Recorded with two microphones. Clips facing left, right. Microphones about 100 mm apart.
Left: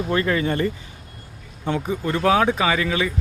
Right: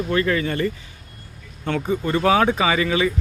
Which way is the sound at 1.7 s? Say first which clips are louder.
Right 1 dB; 5° left (ahead or behind).